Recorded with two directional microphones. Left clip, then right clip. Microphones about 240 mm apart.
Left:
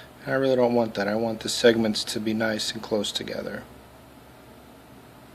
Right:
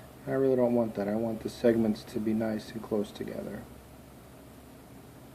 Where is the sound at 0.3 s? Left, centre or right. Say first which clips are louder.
Left 5 dB; left.